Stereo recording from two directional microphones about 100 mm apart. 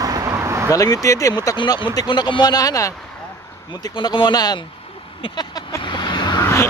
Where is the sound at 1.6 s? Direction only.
50° left (ahead or behind); by 2.9 s 35° left (ahead or behind).